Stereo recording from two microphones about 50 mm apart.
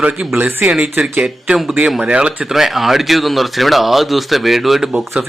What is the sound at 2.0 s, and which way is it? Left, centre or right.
Speech, right.